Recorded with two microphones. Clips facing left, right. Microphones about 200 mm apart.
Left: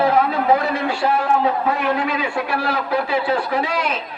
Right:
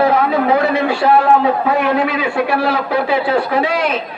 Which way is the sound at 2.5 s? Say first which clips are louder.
Right 5 dB; 75° right (ahead or behind).